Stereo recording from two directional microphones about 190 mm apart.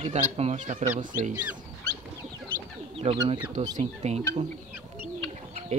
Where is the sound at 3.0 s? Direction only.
30° right (ahead or behind).